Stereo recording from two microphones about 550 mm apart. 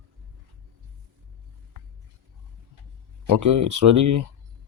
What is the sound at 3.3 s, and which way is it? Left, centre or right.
Speech, right.